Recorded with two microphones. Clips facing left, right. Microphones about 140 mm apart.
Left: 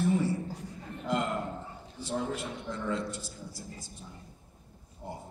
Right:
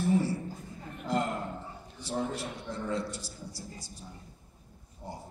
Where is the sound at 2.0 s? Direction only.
35° right (ahead or behind).